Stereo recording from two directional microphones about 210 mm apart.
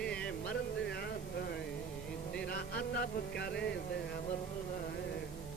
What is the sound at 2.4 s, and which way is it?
Music, 45° left (ahead or behind).